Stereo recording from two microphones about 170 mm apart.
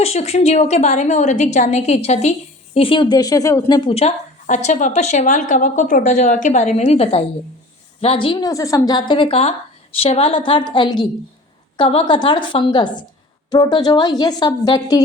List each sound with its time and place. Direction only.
0.0 s a woman's voice: 40° left (ahead or behind)